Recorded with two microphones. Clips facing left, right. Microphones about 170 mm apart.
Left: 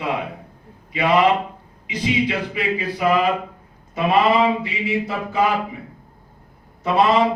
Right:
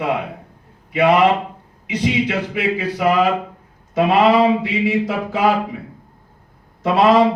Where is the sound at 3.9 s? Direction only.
90° right.